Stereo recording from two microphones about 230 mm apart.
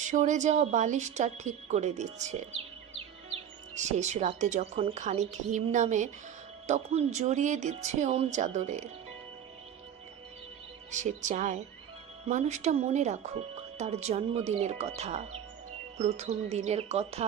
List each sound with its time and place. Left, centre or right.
0.1 s speech: right
10.9 s speech: right